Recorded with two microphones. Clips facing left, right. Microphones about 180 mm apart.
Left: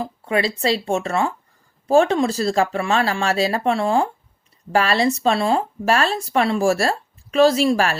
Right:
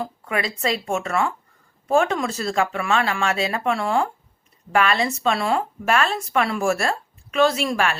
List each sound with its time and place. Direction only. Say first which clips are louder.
0.0 s speech: left 4 dB; 30° left (ahead or behind)